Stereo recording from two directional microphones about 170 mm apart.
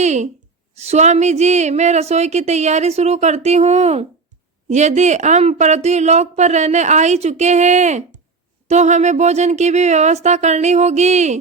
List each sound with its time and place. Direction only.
0.0 s a woman's voice: 40° right (ahead or behind)